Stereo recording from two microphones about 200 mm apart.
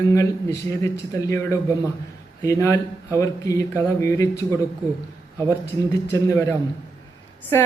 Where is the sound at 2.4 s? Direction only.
15° left (ahead or behind).